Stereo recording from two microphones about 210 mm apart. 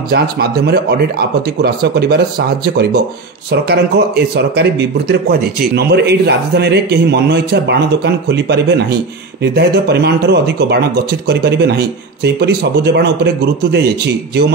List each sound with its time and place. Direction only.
0.1 s speech: 50° right (ahead or behind)